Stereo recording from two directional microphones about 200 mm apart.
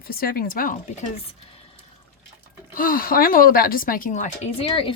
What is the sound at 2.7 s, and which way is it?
A woman's voice, 45° left (ahead or behind).